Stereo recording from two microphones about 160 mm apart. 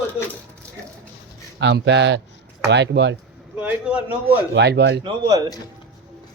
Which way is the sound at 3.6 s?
10° right (ahead or behind).